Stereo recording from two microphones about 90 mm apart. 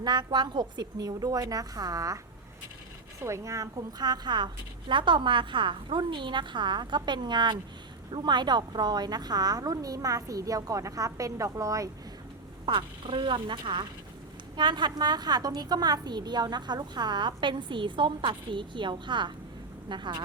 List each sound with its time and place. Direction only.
0.0 s a woman's voice: 55° right (ahead or behind)
3.2 s a woman's voice: 30° right (ahead or behind); by 4.4 s 55° right (ahead or behind)
4.9 s a woman's voice: 65° right (ahead or behind); by 11.9 s 35° right (ahead or behind)
12.6 s a woman's voice: 70° right (ahead or behind)